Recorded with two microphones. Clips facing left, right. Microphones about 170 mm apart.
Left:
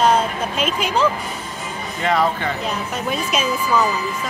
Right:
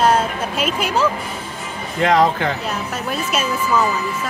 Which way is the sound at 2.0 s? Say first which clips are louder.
Right 4 dB; 90° right.